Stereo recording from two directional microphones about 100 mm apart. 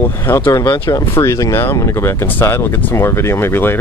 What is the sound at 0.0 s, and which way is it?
Speech, 20° left (ahead or behind).